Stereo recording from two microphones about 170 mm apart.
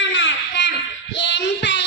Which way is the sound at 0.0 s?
90° left.